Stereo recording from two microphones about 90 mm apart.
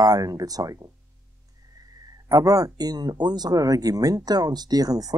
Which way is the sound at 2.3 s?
40° right (ahead or behind).